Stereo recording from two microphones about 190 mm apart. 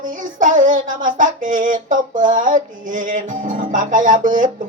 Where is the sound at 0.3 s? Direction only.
45° right (ahead or behind).